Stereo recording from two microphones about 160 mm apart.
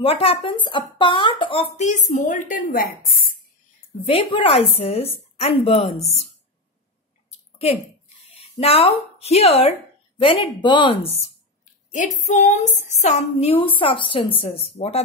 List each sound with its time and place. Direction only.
0.0 s speech: 35° left (ahead or behind); by 2.8 s 55° left (ahead or behind)
4.1 s speech: 35° left (ahead or behind)
7.2 s a sound: 40° left (ahead or behind)
8.4 s speech: 40° left (ahead or behind)
12.3 s a sound: 50° left (ahead or behind)
12.9 s speech: 45° left (ahead or behind)